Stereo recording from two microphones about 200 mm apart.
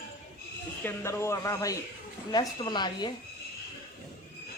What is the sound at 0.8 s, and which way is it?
A woman's voice, 15° left (ahead or behind).